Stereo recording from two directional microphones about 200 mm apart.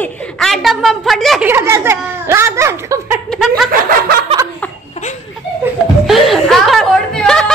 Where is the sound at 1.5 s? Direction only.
15° right (ahead or behind).